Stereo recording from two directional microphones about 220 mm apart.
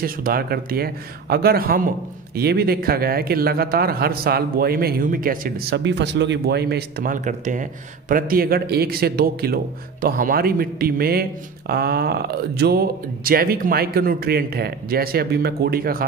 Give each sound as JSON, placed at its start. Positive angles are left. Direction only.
{"t": 0.0, "sound": "speech", "side_deg": -40}